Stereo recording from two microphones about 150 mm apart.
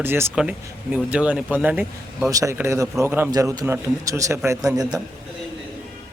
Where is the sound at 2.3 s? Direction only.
20° right (ahead or behind).